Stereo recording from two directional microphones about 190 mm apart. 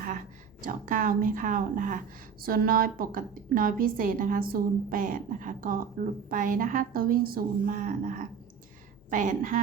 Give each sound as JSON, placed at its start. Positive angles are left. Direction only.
{"t": 0.6, "sound": "a woman's voice", "side_deg": -45}